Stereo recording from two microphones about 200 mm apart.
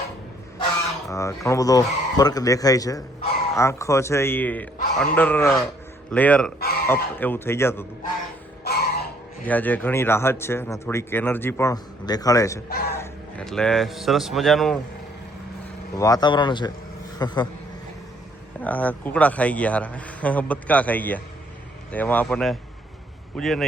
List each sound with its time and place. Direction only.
1.1 s speech: 15° left (ahead or behind)
8.6 s throat clearing: 50° left (ahead or behind)
9.5 s speech: 10° left (ahead or behind)
13.0 s a man's voice: 5° left (ahead or behind)
16.0 s a man's voice: 20° left (ahead or behind)
18.6 s speech: 10° left (ahead or behind)